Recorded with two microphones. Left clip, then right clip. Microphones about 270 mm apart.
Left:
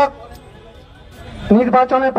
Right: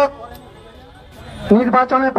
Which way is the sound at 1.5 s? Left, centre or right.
Left.